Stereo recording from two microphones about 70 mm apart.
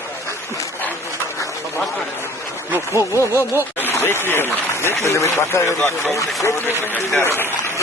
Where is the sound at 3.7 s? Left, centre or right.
Left.